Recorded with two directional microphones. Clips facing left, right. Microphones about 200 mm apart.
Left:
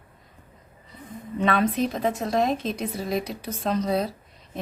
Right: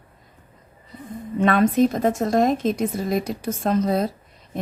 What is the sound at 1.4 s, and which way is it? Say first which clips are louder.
A woman's voice: right 6 dB; 50° right (ahead or behind).